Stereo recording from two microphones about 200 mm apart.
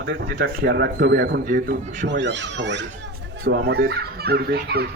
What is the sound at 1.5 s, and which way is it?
Speech, 45° right (ahead or behind).